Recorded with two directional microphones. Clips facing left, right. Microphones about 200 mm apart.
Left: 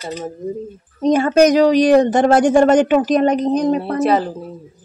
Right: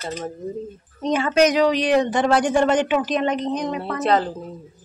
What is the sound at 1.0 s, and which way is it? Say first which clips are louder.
Speech: left 6 dB; 40° left (ahead or behind).